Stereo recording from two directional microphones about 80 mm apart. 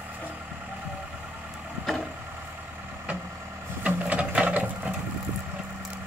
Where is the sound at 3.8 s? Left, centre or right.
Centre.